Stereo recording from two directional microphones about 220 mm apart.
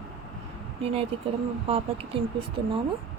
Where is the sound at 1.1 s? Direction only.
25° right (ahead or behind).